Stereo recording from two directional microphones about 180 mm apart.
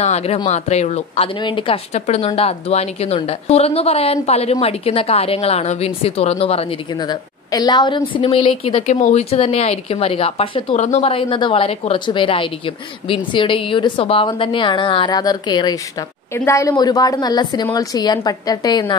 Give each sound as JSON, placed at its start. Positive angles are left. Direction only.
{"t": 0.0, "sound": "a woman's voice", "side_deg": 35}
{"t": 7.0, "sound": "a woman's voice", "side_deg": 20}